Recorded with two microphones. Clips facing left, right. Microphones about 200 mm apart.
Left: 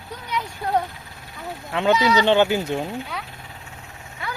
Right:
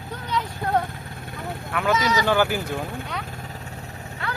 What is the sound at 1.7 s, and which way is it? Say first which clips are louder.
Speech: left 4 dB; 30° left (ahead or behind).